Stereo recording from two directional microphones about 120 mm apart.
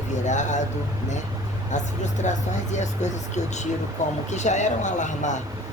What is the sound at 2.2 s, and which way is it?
Speech, 80° left.